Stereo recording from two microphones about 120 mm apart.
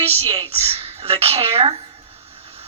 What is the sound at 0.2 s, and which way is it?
A woman's voice, 55° right (ahead or behind).